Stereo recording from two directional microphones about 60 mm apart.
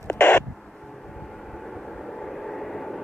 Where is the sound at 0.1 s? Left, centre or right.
Left.